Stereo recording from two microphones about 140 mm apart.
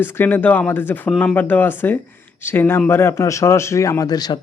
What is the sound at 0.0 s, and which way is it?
Speech, 15° left (ahead or behind).